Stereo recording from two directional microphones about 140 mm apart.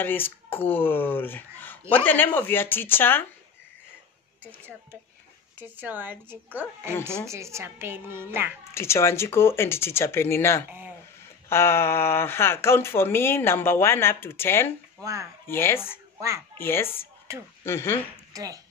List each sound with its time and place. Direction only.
0.0 s speech: 15° left (ahead or behind)
5.6 s a child's voice: 10° right (ahead or behind)
8.7 s speech: 20° left (ahead or behind)
15.0 s speech: 20° right (ahead or behind)
15.4 s speech: 15° left (ahead or behind)
18.3 s speech: 25° right (ahead or behind)